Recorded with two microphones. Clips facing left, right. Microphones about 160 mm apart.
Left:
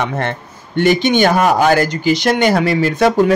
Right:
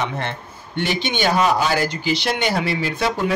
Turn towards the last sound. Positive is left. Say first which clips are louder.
# left 9 dB
turn(degrees=45)  # may be behind; listen again after turning